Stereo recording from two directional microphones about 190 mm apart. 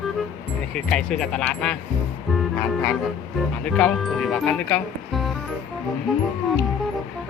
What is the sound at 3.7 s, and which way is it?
Speech, 5° left (ahead or behind).